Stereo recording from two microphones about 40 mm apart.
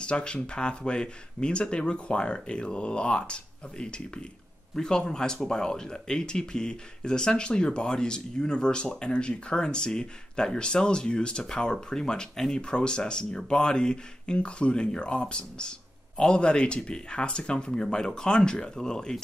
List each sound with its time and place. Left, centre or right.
0.0 s speech: left